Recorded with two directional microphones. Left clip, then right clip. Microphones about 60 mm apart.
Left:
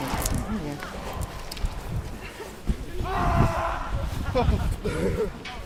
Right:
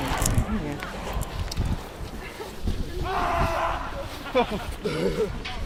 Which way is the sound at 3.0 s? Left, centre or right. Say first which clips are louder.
Right 1 dB; centre.